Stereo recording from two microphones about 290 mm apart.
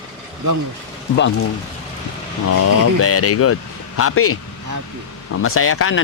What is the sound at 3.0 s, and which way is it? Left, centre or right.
Speech, left.